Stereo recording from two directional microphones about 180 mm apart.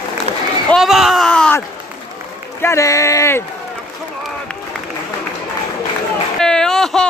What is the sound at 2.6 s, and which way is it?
Speech, 15° left (ahead or behind).